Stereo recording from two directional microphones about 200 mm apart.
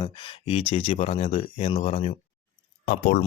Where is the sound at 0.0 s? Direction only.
25° left (ahead or behind).